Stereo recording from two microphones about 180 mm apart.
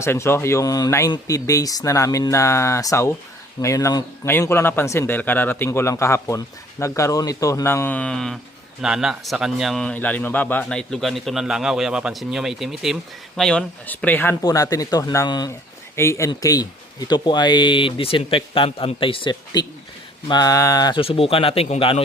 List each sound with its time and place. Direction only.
0.0 s a man's voice: 15° left (ahead or behind); by 22.0 s 35° left (ahead or behind)